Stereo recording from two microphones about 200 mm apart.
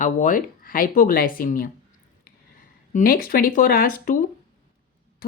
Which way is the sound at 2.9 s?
45° left (ahead or behind).